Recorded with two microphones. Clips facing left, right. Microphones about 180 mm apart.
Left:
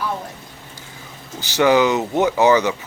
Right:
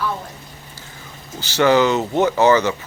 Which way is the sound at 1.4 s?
15° left (ahead or behind).